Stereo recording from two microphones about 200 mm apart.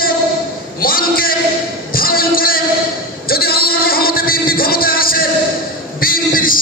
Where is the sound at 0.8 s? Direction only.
45° left (ahead or behind).